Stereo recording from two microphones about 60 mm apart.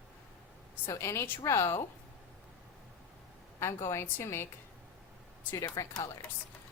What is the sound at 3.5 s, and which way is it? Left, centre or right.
Speech, left.